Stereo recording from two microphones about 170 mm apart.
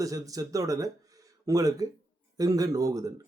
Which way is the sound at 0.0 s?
20° right (ahead or behind).